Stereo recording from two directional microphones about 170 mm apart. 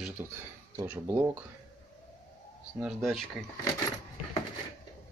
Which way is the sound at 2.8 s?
Centre (ahead or behind).